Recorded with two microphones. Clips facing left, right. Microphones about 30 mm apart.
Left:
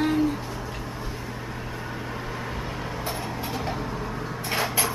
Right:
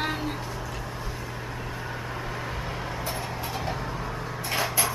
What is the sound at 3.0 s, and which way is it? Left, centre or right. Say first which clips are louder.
Vehicle: left 1 dB; centre.